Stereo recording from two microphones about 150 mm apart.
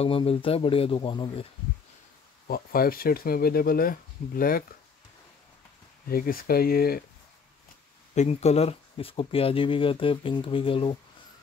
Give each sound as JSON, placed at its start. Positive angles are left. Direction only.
{"t": 0.0, "sound": "speech", "side_deg": 40}
{"t": 2.4, "sound": "speech", "side_deg": 75}
{"t": 6.0, "sound": "speech", "side_deg": 75}
{"t": 8.1, "sound": "speech", "side_deg": 50}